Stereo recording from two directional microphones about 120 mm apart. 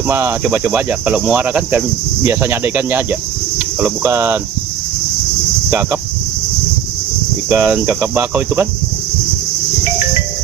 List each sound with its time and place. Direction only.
0.1 s cricket: 15° right (ahead or behind)
5.7 s cricket: 15° right (ahead or behind)
7.4 s cricket: 15° right (ahead or behind)